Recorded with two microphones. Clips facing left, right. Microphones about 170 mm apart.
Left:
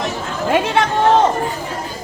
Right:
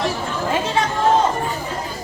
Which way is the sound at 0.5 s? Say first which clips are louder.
Left 6 dB; 65° left (ahead or behind).